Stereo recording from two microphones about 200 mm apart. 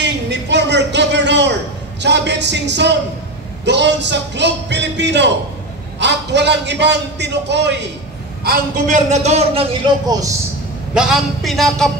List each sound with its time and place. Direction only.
0.0 s a sound: 60° right (ahead or behind)
3.6 s a man's voice: 60° right (ahead or behind)
8.5 s a man's voice: 40° right (ahead or behind); by 10.3 s 20° right (ahead or behind)
11.0 s speech: 5° right (ahead or behind)